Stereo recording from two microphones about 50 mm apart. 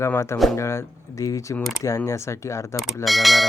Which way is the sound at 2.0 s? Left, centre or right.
Left.